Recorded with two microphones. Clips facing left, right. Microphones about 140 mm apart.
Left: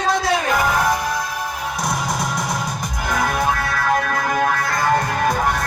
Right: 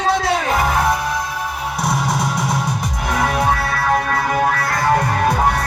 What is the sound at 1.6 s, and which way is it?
Music, 5° right (ahead or behind).